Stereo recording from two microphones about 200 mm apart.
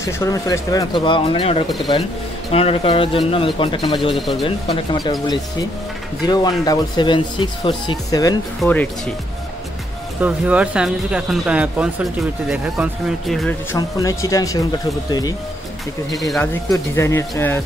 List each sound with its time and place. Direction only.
0.0 s speech: 15° left (ahead or behind)
10.2 s speech: 5° right (ahead or behind)
13.7 s speech: 15° left (ahead or behind)
16.2 s speech: centre (ahead or behind)
16.7 s speech: 15° left (ahead or behind)